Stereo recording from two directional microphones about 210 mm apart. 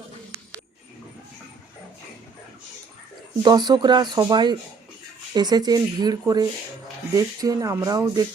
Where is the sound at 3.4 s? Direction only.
20° right (ahead or behind).